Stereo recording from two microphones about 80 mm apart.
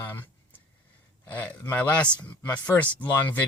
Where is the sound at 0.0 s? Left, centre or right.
Left.